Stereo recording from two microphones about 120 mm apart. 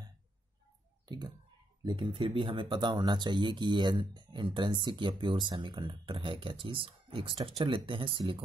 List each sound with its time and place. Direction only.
1.0 s speech: 35° right (ahead or behind)